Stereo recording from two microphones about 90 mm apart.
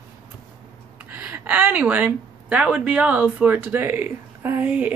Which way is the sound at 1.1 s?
20° right (ahead or behind).